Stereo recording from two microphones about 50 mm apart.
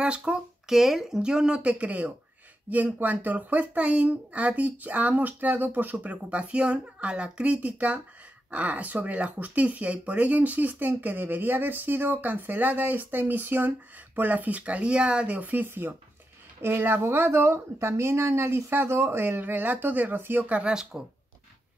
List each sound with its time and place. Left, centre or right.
0.0 s speech: right
0.7 s speech: centre
1.6 s speech: right
20.4 s speech: right